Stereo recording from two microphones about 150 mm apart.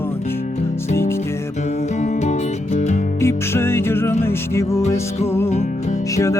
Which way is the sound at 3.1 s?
15° left (ahead or behind).